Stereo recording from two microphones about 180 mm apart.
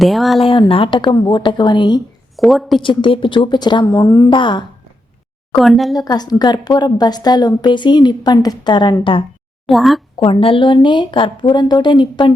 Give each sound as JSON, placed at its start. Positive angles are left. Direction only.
{"t": 0.0, "sound": "a woman's voice", "side_deg": 0}
{"t": 0.3, "sound": "a woman's voice", "side_deg": 30}
{"t": 2.3, "sound": "a woman's voice", "side_deg": 0}
{"t": 2.8, "sound": "a woman's voice", "side_deg": 25}
{"t": 5.5, "sound": "a woman's voice", "side_deg": 0}
{"t": 6.1, "sound": "a woman's voice", "side_deg": 20}
{"t": 9.6, "sound": "a woman's voice", "side_deg": 0}
{"t": 10.2, "sound": "a woman's voice", "side_deg": 30}